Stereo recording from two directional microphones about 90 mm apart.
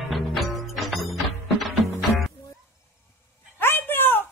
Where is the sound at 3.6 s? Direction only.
25° left (ahead or behind).